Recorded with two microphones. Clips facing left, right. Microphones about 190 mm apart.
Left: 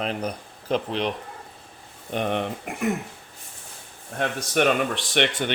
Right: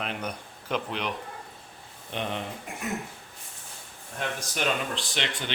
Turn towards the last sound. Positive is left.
turn(degrees=60)  # may be behind; listen again after turning